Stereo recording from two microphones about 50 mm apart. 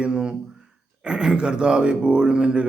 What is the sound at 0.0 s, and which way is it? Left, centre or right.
A man's voice, centre.